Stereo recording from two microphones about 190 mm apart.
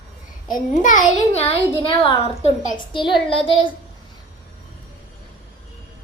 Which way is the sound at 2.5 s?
40° left (ahead or behind).